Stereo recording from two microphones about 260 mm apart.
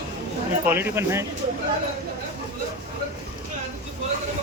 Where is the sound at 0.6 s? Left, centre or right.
Centre.